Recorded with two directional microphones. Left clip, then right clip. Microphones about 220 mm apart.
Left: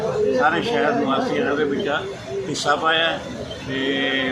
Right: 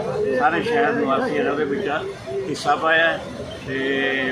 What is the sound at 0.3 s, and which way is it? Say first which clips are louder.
Speech: right 3 dB; centre (ahead or behind).